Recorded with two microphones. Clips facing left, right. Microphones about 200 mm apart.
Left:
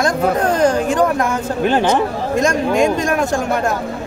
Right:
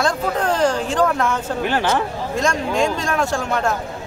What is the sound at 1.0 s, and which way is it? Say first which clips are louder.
Speech: left 3 dB; 15° left (ahead or behind).